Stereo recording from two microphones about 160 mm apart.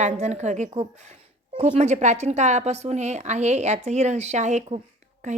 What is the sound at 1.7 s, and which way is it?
A woman's voice, 45° right (ahead or behind).